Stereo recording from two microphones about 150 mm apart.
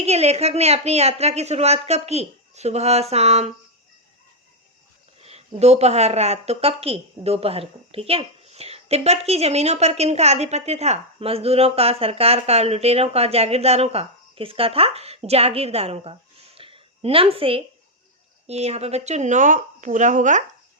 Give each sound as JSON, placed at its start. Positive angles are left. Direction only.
{"t": 0.0, "sound": "a woman's voice", "side_deg": -45}
{"t": 5.2, "sound": "a woman's voice", "side_deg": -45}
{"t": 16.6, "sound": "a sound", "side_deg": -35}
{"t": 18.4, "sound": "speech", "side_deg": -45}